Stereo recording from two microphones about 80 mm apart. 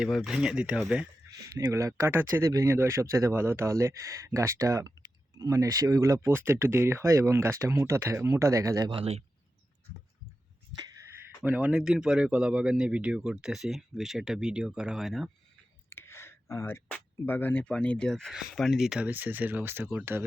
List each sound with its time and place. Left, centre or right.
0.0 s speech: centre
0.3 s speech: centre
1.5 s speech: right
2.1 s speech: right
2.5 s speech: right
11.4 s speech: centre
11.8 s speech: centre
15.9 s a sound: left
17.2 s speech: left; by 19.0 s centre
19.0 s speech: right